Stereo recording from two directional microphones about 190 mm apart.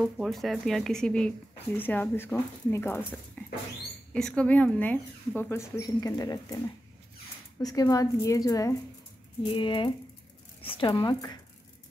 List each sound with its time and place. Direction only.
0.0 s speech: centre (ahead or behind)
3.4 s mouse: 10° left (ahead or behind)
4.1 s speech: 5° left (ahead or behind); by 11.3 s 20° left (ahead or behind)